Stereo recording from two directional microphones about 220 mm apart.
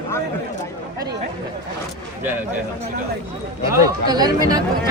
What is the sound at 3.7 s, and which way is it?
Speech, 15° right (ahead or behind).